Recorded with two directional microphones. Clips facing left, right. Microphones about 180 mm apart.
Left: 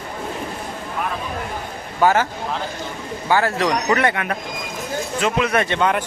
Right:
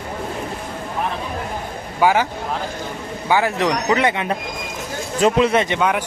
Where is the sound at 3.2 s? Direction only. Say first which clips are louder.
Right 1 dB; 15° right (ahead or behind).